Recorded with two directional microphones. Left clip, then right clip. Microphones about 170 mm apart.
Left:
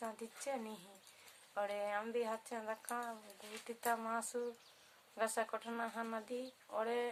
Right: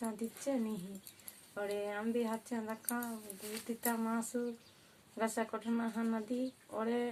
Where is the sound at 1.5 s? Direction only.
20° left (ahead or behind).